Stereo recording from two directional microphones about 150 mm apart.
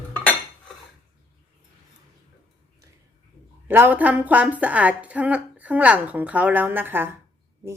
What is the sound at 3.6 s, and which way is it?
A woman's voice, 15° right (ahead or behind).